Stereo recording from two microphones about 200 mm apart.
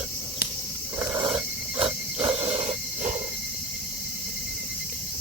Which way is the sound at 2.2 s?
25° right (ahead or behind).